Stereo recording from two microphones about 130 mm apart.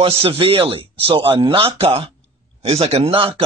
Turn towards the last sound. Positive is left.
turn(degrees=-45)  # may be behind; listen again after turning